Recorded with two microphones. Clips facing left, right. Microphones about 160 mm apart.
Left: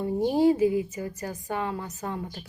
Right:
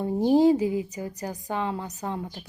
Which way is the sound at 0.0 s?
20° right (ahead or behind).